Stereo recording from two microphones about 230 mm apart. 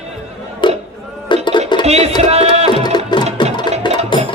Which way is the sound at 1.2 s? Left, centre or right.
Centre.